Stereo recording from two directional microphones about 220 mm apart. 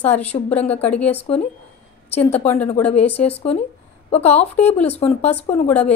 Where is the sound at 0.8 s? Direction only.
5° left (ahead or behind).